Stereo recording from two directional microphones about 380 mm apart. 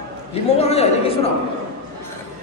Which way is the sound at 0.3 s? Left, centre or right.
Centre.